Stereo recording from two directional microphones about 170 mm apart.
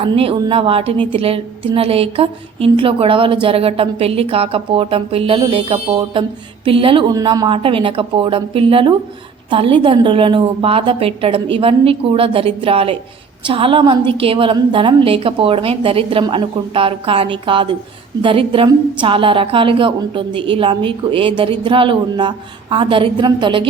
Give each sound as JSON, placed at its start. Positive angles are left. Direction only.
{"t": 0.0, "sound": "a woman's voice", "side_deg": -30}